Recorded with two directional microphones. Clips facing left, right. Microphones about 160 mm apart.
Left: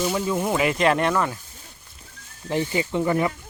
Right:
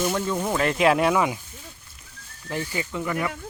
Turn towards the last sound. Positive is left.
turn(degrees=30)  # may be behind; listen again after turning